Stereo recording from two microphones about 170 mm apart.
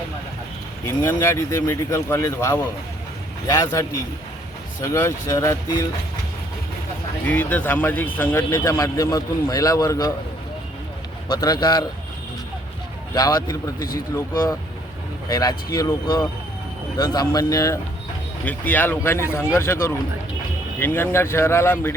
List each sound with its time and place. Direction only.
0.9 s a man's voice: 15° left (ahead or behind)
7.3 s a man's voice: 10° left (ahead or behind)
11.3 s a man's voice: 20° left (ahead or behind)
13.1 s a man's voice: 20° left (ahead or behind)
13.7 s speech: 60° left (ahead or behind)
15.3 s a man's voice: 20° left (ahead or behind)